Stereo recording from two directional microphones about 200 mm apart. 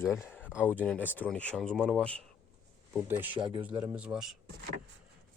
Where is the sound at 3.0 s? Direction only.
10° right (ahead or behind).